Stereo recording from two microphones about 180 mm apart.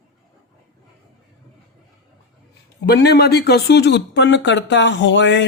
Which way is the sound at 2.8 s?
65° left (ahead or behind).